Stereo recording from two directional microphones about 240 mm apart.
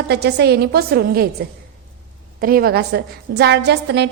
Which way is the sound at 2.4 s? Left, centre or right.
Right.